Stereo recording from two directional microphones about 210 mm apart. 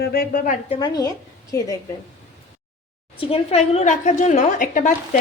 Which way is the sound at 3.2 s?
25° left (ahead or behind).